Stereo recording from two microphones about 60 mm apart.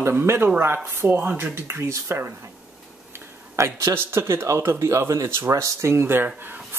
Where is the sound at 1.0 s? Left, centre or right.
Right.